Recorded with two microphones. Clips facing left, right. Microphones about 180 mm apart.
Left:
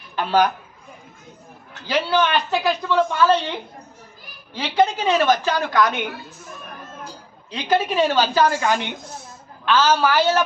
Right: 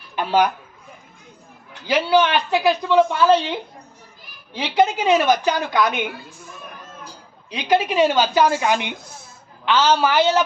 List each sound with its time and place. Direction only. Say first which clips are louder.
0.2 s a woman's voice: even; 15° right (ahead or behind)
1.9 s a woman's voice: right 3 dB; 15° right (ahead or behind)
4.5 s a woman's voice: right 1 dB; 15° right (ahead or behind)
7.5 s a woman's voice: right 1 dB; 15° right (ahead or behind)